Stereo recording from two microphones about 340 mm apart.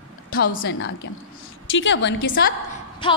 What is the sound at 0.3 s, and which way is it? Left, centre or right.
A woman's voice, left.